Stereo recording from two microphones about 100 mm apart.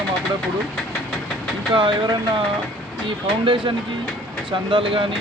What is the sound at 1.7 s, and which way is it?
Speech, 55° right (ahead or behind).